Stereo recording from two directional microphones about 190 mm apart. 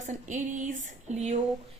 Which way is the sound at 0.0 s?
40° right (ahead or behind).